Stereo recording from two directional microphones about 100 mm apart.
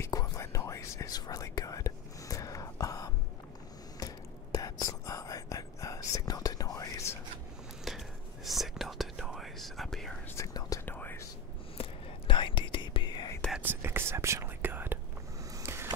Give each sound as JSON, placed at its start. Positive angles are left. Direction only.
{"t": 0.1, "sound": "whispering", "side_deg": 35}
{"t": 8.5, "sound": "whispering", "side_deg": 0}
{"t": 10.3, "sound": "whispering", "side_deg": 35}
{"t": 10.9, "sound": "whispering", "side_deg": 20}
{"t": 11.8, "sound": "whispering", "side_deg": 60}
{"t": 13.6, "sound": "whispering", "side_deg": -20}
{"t": 15.5, "sound": "skateboard", "side_deg": -25}